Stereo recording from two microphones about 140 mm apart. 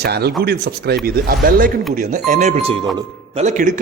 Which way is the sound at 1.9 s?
65° right (ahead or behind).